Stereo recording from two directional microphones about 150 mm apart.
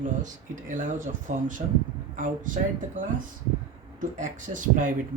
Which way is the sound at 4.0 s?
60° right (ahead or behind).